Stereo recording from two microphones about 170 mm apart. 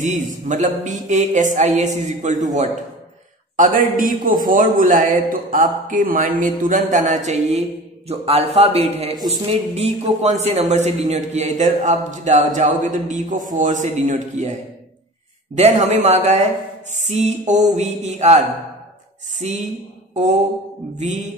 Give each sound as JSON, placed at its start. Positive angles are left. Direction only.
{"t": 0.0, "sound": "a man's voice", "side_deg": -45}
{"t": 19.4, "sound": "a man's voice", "side_deg": -40}